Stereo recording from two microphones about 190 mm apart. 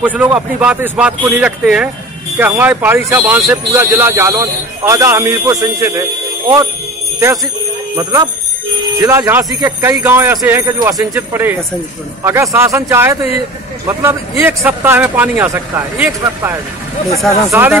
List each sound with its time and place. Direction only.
0.0 s speech: 10° right (ahead or behind)
7.9 s speech: 15° right (ahead or behind)